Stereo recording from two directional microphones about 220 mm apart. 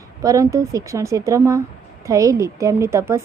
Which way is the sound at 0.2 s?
15° right (ahead or behind).